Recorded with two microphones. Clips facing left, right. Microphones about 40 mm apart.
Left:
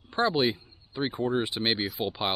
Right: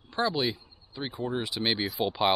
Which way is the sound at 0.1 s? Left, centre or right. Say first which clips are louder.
Left 3 dB; left.